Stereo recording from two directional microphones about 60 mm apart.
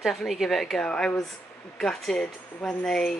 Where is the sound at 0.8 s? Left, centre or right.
Centre.